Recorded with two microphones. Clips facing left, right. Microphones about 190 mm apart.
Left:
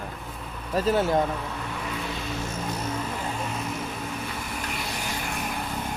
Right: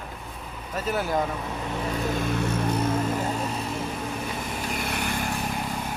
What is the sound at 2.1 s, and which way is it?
Vehicle, 55° right (ahead or behind).